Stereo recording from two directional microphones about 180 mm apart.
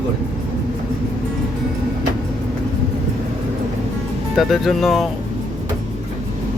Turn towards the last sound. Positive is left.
turn(degrees=0)  # may be behind; listen again after turning